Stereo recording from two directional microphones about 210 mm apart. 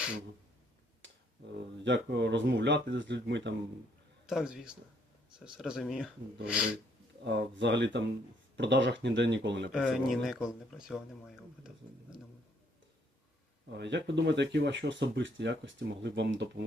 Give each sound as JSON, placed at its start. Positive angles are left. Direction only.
{"t": 1.8, "sound": "speech", "side_deg": -55}
{"t": 4.3, "sound": "speech", "side_deg": 0}
{"t": 7.3, "sound": "speech", "side_deg": -55}
{"t": 9.7, "sound": "speech", "side_deg": 0}
{"t": 13.7, "sound": "speech", "side_deg": -55}